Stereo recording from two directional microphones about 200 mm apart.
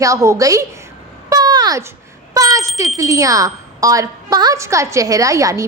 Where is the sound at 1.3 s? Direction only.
20° right (ahead or behind).